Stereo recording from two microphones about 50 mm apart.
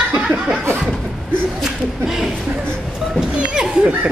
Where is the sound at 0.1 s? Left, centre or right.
Centre.